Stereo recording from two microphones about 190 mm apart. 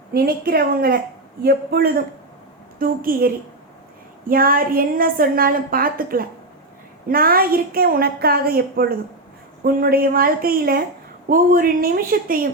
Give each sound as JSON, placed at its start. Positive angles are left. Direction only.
{"t": 0.1, "sound": "a woman's voice", "side_deg": -50}